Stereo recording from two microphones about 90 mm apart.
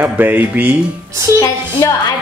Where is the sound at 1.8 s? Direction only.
40° left (ahead or behind).